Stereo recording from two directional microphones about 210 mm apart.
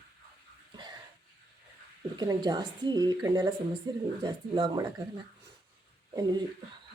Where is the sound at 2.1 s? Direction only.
20° right (ahead or behind).